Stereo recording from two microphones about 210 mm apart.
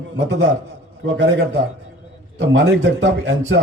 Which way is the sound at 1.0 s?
55° right (ahead or behind).